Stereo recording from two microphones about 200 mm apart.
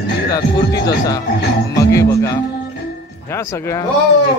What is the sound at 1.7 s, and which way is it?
Speech, 15° left (ahead or behind).